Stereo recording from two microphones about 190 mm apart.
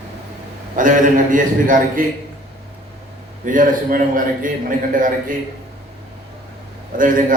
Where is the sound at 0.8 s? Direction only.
45° right (ahead or behind).